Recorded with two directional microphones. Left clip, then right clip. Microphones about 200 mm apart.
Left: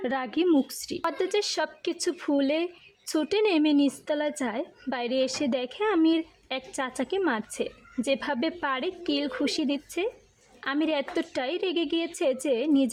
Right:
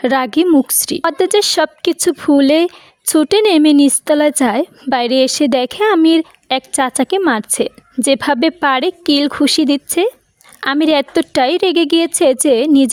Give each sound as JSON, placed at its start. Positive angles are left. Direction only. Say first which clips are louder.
{"t": 0.0, "sound": "a woman's voice", "louder": "right 14 dB", "side_deg": -45}